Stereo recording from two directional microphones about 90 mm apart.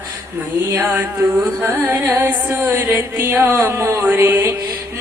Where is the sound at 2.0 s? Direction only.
20° right (ahead or behind).